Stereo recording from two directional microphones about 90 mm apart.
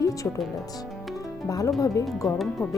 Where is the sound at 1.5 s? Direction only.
40° left (ahead or behind).